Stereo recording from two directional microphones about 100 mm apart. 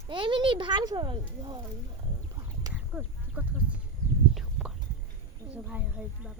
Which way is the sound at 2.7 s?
15° right (ahead or behind).